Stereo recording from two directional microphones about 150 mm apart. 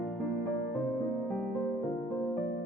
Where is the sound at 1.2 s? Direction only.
10° left (ahead or behind).